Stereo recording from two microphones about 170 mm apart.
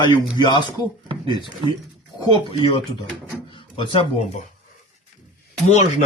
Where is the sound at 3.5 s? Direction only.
30° left (ahead or behind).